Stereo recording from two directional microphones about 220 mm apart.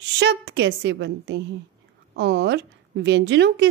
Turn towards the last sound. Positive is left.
turn(degrees=-50)  # may be behind; listen again after turning